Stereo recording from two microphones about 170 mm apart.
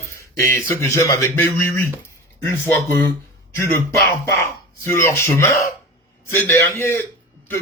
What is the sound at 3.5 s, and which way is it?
Speech, 15° left (ahead or behind).